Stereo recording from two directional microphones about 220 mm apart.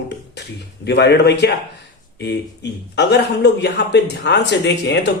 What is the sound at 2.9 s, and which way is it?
Speech, 50° left (ahead or behind).